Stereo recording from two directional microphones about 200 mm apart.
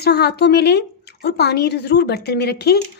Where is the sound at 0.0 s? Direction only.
55° left (ahead or behind).